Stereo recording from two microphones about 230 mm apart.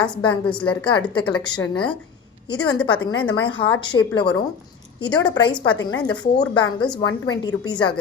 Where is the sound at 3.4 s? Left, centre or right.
Left.